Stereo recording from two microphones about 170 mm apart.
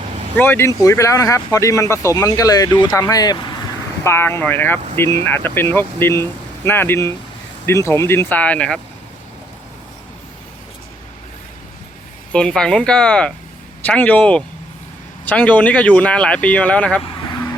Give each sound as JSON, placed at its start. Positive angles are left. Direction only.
{"t": 0.3, "sound": "speech", "side_deg": 15}
{"t": 4.0, "sound": "speech", "side_deg": 15}
{"t": 12.3, "sound": "speech", "side_deg": 5}